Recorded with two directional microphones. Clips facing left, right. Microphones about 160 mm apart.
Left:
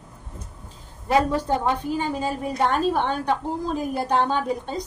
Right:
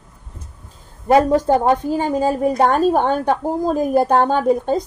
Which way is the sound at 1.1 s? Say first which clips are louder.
Right 7 dB; 45° right (ahead or behind).